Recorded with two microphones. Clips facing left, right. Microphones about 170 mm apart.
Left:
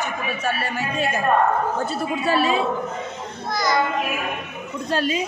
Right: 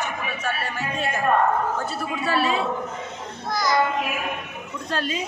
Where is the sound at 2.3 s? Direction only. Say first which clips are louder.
Left 3 dB; 15° left (ahead or behind).